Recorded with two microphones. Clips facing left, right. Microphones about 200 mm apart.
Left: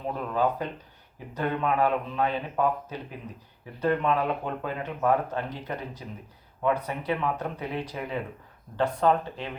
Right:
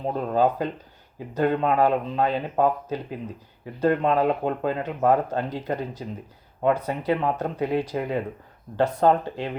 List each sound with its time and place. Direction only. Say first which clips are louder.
0.0 s speech: right 5 dB; 35° right (ahead or behind)